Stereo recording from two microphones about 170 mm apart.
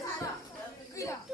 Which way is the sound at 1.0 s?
15° left (ahead or behind).